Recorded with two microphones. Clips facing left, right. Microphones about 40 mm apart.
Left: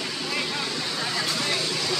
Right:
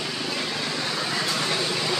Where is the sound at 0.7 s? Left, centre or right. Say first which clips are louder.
Right 2 dB; right.